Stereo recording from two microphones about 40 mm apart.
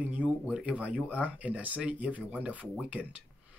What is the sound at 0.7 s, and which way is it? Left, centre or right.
Speech, right.